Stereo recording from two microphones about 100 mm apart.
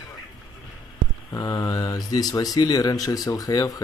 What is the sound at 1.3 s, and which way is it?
Speech, 40° left (ahead or behind).